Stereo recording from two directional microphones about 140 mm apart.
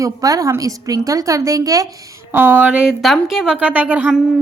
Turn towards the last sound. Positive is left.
turn(degrees=-10)  # may be behind; listen again after turning